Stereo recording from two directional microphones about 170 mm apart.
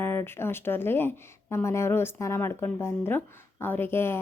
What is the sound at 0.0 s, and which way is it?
Speech, 15° left (ahead or behind).